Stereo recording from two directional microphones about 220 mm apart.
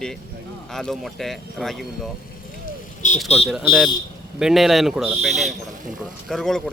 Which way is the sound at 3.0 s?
35° left (ahead or behind).